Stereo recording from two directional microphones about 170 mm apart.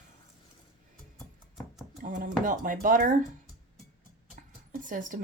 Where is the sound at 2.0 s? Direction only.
50° right (ahead or behind).